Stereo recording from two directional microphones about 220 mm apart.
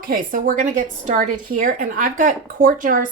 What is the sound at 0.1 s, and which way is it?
Speech, 40° right (ahead or behind).